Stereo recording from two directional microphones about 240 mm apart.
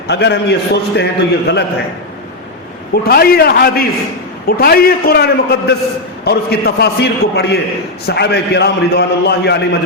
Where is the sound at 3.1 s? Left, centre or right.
Left.